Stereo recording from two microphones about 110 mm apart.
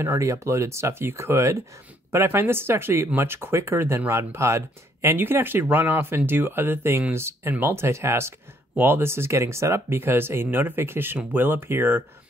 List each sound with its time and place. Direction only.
0.0 s speech: 25° right (ahead or behind)